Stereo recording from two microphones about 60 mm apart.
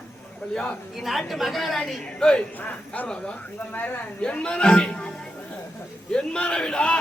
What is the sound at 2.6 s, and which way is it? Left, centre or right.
A man's voice, left.